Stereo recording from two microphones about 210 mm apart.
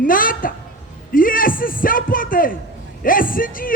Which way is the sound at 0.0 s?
40° left (ahead or behind).